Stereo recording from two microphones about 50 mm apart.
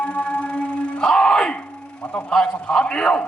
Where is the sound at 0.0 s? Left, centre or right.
Left.